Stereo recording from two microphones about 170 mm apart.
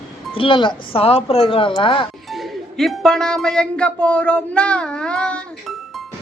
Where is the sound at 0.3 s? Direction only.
30° left (ahead or behind).